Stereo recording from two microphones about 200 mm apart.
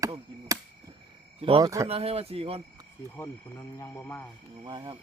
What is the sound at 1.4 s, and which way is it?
Speech, 25° right (ahead or behind).